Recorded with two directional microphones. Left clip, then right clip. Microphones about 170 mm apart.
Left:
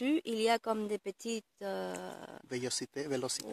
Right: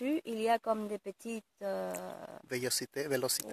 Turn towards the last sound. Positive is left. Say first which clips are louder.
# right 3 dB
turn(degrees=10)  # may be behind; listen again after turning